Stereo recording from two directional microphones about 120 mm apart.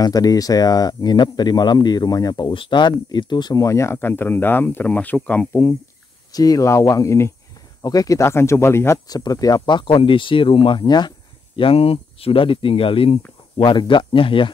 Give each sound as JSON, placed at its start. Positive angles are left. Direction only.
{"t": 0.0, "sound": "speech", "side_deg": 30}
{"t": 2.5, "sound": "speech", "side_deg": 45}
{"t": 5.5, "sound": "speech", "side_deg": 20}
{"t": 13.6, "sound": "speech", "side_deg": 40}